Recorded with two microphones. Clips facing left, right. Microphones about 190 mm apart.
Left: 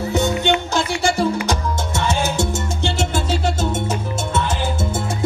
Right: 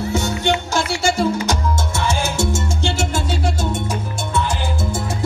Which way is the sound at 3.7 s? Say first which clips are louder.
Left 1 dB; 25° left (ahead or behind).